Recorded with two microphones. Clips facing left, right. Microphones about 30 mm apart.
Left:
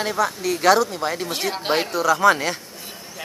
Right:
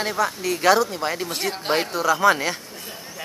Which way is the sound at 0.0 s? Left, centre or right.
Centre.